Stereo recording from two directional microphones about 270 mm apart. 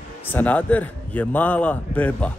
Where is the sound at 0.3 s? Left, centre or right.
Centre.